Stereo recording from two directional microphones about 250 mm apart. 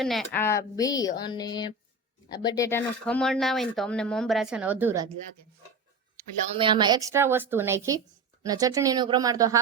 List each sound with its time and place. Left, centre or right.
0.0 s speech: centre
6.6 s a woman's voice: centre